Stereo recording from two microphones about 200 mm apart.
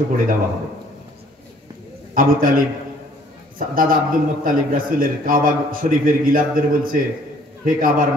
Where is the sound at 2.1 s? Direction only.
45° right (ahead or behind).